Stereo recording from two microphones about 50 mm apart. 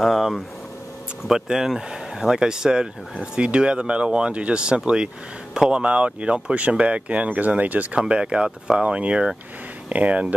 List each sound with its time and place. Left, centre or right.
0.0 s speech: centre; by 7.9 s right
7.9 s speech: right
8.5 s speech: centre
8.8 s speech: right